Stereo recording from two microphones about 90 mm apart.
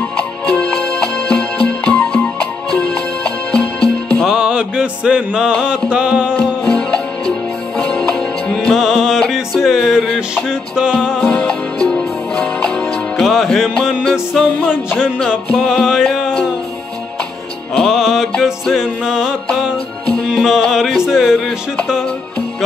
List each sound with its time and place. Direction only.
0.5 s music: 10° left (ahead or behind)
4.3 s music: 10° right (ahead or behind)
7.8 s music: 10° left (ahead or behind)
8.7 s music: centre (ahead or behind)
11.1 s music: 10° left (ahead or behind)
15.0 s music: 15° left (ahead or behind)
15.5 s music: 5° left (ahead or behind)
17.7 s music: centre (ahead or behind)
20.1 s music: 10° left (ahead or behind)